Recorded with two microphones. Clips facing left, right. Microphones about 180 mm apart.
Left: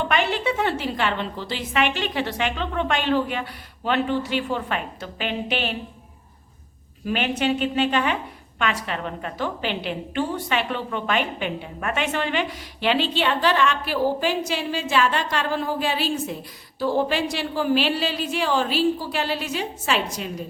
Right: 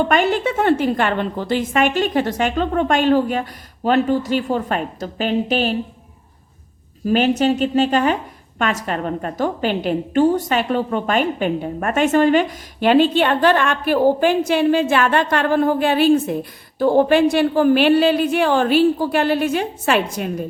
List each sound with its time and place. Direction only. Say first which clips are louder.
0.1 s a woman's voice: right 5 dB; 45° right (ahead or behind)
7.0 s a woman's voice: right 8 dB; 40° right (ahead or behind)